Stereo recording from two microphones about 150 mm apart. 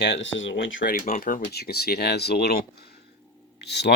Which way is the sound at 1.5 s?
90° left.